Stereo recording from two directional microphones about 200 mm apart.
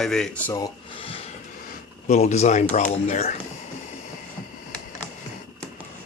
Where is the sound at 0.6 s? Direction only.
25° left (ahead or behind).